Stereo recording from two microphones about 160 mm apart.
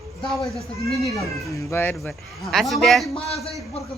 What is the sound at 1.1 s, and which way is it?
Speech, 15° left (ahead or behind).